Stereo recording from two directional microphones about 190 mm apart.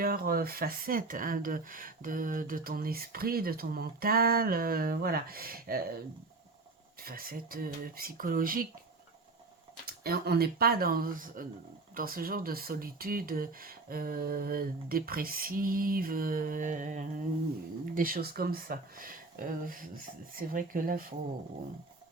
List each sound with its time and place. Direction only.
0.0 s speech: 50° right (ahead or behind)
7.0 s speech: 50° right (ahead or behind)
9.8 s speech: 55° right (ahead or behind)